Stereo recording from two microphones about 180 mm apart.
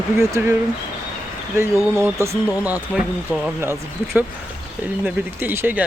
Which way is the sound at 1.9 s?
15° right (ahead or behind).